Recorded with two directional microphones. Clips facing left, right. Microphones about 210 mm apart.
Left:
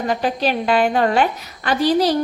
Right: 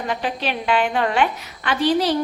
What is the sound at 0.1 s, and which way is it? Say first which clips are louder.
A woman's voice: left 5 dB; 40° left (ahead or behind).